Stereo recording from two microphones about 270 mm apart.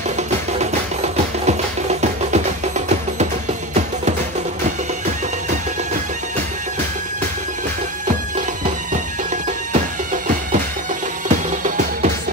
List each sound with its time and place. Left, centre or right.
1.1 s music: right
11.2 s music: right